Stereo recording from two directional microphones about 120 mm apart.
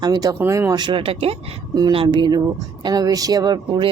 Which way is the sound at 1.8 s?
40° right (ahead or behind).